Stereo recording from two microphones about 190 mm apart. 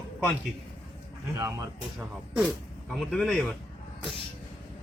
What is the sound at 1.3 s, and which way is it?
Speech, 20° right (ahead or behind).